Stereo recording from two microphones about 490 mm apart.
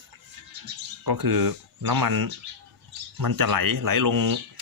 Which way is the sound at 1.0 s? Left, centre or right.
Right.